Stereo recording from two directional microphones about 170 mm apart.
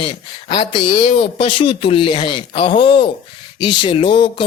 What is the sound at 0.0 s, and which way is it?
Speech, 30° left (ahead or behind).